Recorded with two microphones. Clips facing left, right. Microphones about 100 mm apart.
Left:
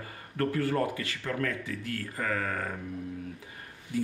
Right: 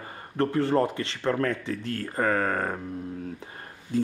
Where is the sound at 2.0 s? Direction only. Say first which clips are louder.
Right 8 dB; 45° right (ahead or behind).